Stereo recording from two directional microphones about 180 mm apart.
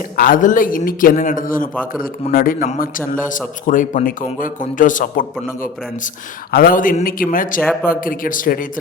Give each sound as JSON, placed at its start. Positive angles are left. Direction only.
{"t": 0.2, "sound": "a man's voice", "side_deg": 50}
{"t": 6.5, "sound": "a man's voice", "side_deg": 55}
{"t": 7.6, "sound": "a man's voice", "side_deg": 0}
{"t": 7.9, "sound": "a man's voice", "side_deg": 50}